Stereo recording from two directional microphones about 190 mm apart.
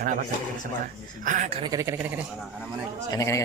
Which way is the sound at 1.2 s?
40° right (ahead or behind).